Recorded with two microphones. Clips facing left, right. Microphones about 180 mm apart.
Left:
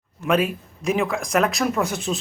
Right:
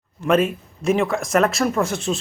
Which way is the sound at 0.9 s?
Centre (ahead or behind).